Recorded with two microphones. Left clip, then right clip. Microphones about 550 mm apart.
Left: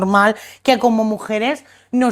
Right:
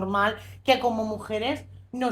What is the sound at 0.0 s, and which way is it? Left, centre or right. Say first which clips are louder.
A woman's voice: left 10 dB; left.